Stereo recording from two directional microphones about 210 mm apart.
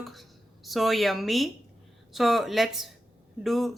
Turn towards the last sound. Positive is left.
turn(degrees=0)  # may be behind; listen again after turning